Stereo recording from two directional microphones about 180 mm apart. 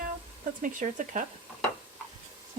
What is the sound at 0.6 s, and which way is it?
Speech, 45° right (ahead or behind).